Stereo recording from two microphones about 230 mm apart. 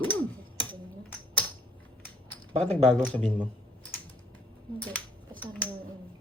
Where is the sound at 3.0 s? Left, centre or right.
Centre.